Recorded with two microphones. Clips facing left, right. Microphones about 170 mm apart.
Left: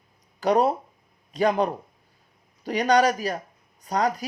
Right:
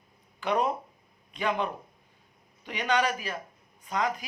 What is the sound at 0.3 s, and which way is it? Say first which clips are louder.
Speech: left 7 dB; 40° left (ahead or behind).